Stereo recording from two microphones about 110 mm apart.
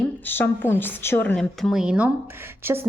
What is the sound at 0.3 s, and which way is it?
A woman's voice, 20° left (ahead or behind).